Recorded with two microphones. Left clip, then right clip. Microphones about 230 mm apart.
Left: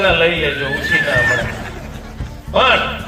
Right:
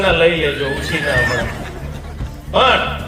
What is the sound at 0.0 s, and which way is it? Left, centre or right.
Music, right.